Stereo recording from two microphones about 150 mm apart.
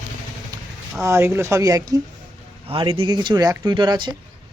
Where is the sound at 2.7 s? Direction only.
35° right (ahead or behind).